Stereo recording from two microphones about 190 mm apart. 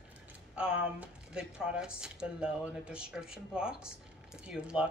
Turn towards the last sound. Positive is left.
turn(degrees=-5)  # may be behind; listen again after turning